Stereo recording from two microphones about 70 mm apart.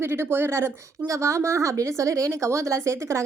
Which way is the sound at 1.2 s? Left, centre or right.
Right.